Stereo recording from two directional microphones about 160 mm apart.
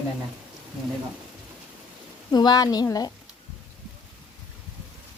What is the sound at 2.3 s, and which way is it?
Speech, 25° left (ahead or behind).